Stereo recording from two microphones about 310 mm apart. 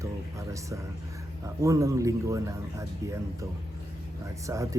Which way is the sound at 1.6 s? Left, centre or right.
Centre.